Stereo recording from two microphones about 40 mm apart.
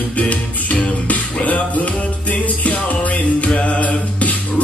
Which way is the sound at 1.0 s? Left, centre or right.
Left.